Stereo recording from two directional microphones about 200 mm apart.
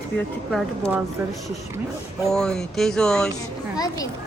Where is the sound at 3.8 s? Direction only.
20° left (ahead or behind).